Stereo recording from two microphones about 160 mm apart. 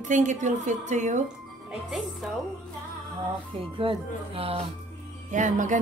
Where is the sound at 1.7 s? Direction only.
5° right (ahead or behind).